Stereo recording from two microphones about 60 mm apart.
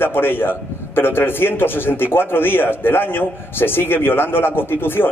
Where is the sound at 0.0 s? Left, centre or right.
Left.